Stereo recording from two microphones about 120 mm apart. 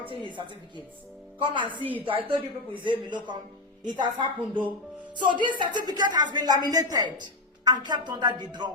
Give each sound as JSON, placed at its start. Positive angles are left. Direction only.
{"t": 0.1, "sound": "chopping", "side_deg": -40}
{"t": 1.4, "sound": "a woman's voice", "side_deg": -40}
{"t": 2.8, "sound": "a woman's voice", "side_deg": -40}